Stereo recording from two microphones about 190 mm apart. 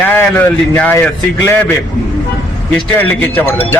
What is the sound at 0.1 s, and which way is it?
A man's voice, 10° left (ahead or behind).